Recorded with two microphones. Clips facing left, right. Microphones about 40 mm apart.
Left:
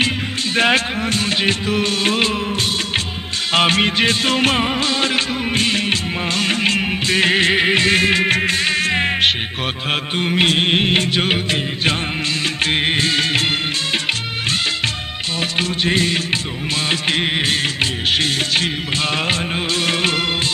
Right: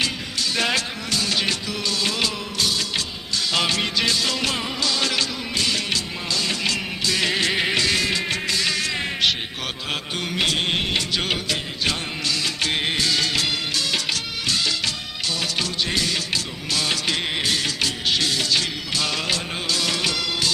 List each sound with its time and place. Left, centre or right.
0.5 s music: left
12.6 s music: left
13.9 s music of bollywood: left
15.5 s music: left
18.1 s music of bollywood: left